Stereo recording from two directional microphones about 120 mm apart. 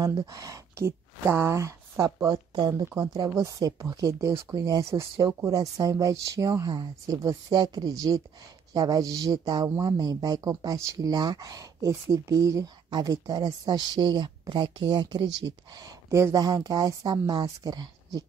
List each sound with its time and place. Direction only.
0.0 s speech: 30° right (ahead or behind)